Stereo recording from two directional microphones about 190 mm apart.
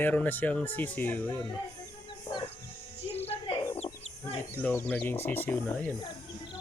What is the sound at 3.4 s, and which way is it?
Bird, 25° left (ahead or behind).